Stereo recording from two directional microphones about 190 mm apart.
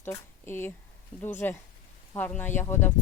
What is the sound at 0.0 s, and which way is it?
Speech, 10° left (ahead or behind).